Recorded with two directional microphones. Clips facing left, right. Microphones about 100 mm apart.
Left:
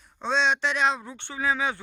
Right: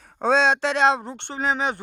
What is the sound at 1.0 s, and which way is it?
Speech, 50° right (ahead or behind).